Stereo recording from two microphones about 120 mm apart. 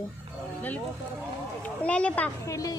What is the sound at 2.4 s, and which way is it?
Speech, 30° left (ahead or behind).